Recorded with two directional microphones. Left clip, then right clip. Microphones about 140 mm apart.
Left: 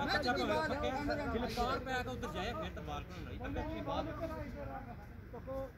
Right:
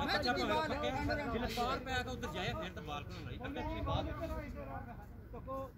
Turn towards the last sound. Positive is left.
turn(degrees=-5)  # may be behind; listen again after turning